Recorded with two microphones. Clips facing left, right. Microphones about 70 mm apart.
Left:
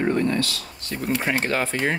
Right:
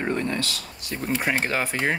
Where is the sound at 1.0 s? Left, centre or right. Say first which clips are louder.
Left 1 dB; centre.